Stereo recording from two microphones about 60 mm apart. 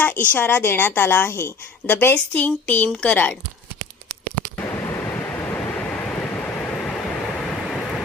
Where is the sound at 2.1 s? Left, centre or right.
Left.